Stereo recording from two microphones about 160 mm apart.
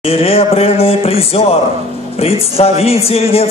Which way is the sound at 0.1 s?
40° left (ahead or behind).